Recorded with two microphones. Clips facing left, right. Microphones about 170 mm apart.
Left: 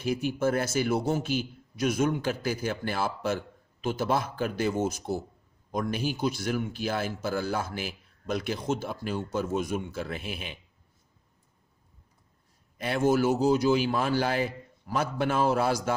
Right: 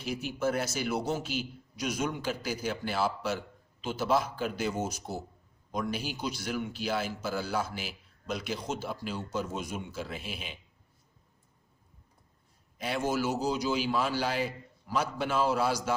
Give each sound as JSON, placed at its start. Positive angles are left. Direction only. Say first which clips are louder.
{"t": 0.0, "sound": "a man's voice", "louder": "left 4 dB", "side_deg": 50}
{"t": 12.8, "sound": "a man's voice", "louder": "left 6 dB", "side_deg": 50}